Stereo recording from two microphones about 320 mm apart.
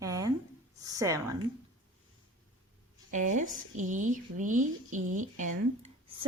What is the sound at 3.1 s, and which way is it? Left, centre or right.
Speech, right.